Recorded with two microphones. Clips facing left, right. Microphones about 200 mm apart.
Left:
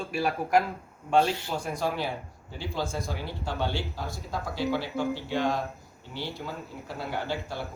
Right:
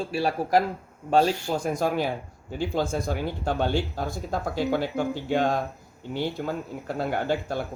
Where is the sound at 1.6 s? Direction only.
50° right (ahead or behind).